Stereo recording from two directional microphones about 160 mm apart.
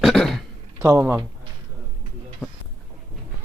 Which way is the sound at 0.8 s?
15° right (ahead or behind).